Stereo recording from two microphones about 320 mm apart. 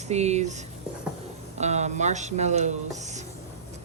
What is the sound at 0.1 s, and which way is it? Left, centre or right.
Speech, right.